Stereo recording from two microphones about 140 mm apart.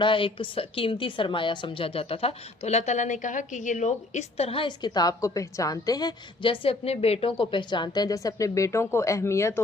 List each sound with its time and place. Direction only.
0.0 s a woman's voice: 35° left (ahead or behind); by 9.6 s 20° left (ahead or behind)